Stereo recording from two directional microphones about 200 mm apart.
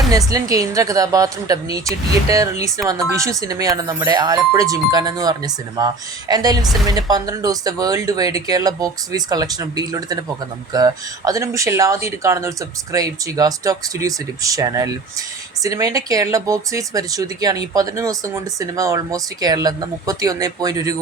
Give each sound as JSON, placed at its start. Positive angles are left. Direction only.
{"t": 0.1, "sound": "speech", "side_deg": -15}